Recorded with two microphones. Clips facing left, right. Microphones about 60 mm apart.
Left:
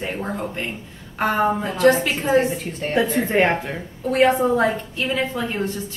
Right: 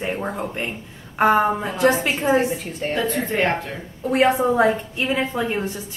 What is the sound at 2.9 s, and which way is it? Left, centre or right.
Speech, centre.